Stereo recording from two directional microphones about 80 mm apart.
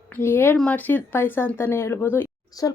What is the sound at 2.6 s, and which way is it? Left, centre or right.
Speech, left.